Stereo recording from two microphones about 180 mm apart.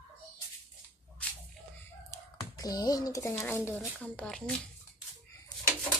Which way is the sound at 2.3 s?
20° left (ahead or behind).